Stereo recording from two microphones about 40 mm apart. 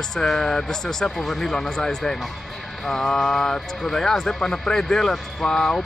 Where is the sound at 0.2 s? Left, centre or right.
Centre.